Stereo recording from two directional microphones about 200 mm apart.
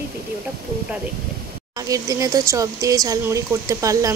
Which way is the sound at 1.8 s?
15° right (ahead or behind).